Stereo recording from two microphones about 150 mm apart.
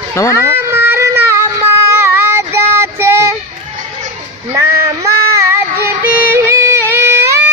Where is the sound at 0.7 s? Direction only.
15° right (ahead or behind).